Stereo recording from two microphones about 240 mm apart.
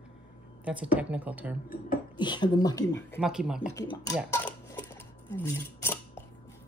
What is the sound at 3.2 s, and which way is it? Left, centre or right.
Speech, centre.